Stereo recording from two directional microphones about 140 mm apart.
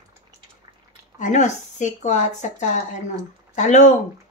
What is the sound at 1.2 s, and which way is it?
Speech, 60° left (ahead or behind).